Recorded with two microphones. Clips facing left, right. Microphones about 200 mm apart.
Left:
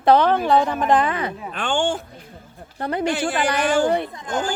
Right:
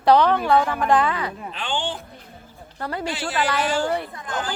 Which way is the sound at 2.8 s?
20° left (ahead or behind).